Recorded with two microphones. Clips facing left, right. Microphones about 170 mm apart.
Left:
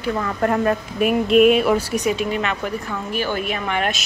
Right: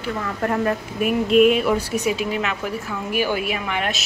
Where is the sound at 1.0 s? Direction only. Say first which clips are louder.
Left 1 dB; 70° left (ahead or behind).